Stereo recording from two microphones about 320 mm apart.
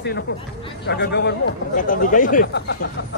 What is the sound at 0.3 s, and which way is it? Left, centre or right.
Speech, left.